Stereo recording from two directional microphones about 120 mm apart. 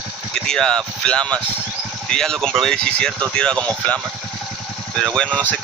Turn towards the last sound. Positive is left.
turn(degrees=15)  # may be behind; listen again after turning